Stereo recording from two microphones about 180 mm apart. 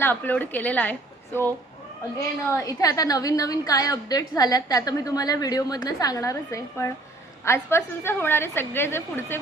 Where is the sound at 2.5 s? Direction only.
20° left (ahead or behind).